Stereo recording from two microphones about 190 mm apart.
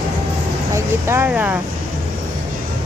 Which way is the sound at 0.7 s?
15° right (ahead or behind).